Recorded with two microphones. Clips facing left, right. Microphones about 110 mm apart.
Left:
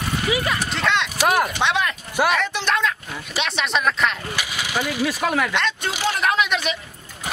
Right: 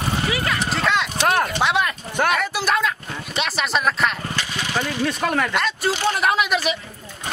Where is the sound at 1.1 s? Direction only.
10° left (ahead or behind).